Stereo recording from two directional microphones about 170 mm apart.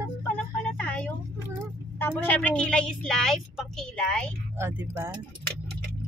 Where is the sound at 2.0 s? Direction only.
10° left (ahead or behind).